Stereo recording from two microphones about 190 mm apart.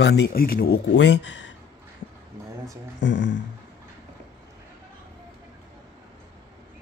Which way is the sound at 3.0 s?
70° left (ahead or behind).